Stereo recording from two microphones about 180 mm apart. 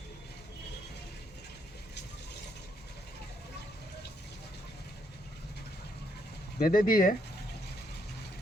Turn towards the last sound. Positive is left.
turn(degrees=50)  # may be behind; listen again after turning